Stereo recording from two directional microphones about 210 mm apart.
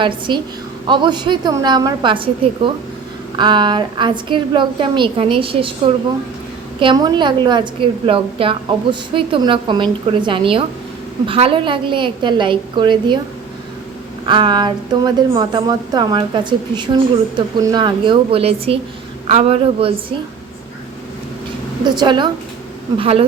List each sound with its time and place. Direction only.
0.0 s a woman's voice: 25° right (ahead or behind)
3.3 s a woman's voice: 20° right (ahead or behind)
14.3 s a woman's voice: 20° right (ahead or behind)
21.8 s a woman's voice: 20° right (ahead or behind)